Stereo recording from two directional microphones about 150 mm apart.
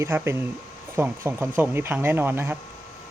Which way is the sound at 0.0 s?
15° right (ahead or behind).